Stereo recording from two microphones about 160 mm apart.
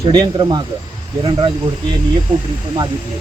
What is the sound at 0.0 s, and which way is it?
Speech, 30° right (ahead or behind).